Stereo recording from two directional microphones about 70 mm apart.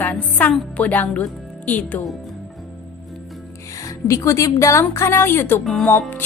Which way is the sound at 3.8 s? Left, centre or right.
Left.